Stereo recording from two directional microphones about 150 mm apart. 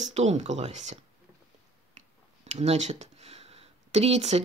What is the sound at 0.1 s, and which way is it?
Speech, 45° right (ahead or behind).